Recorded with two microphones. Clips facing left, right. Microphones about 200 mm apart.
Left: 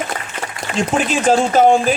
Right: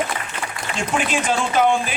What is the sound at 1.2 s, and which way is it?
Speech, 40° left (ahead or behind).